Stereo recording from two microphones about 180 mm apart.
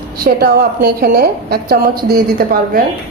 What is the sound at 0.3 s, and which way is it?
A woman's voice, 60° right (ahead or behind).